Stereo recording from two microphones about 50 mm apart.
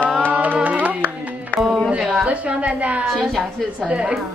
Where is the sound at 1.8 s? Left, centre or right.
Right.